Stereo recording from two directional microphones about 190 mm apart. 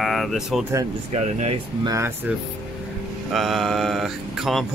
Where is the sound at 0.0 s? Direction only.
Centre (ahead or behind).